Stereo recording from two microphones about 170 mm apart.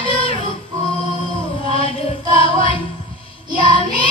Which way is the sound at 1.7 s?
35° left (ahead or behind).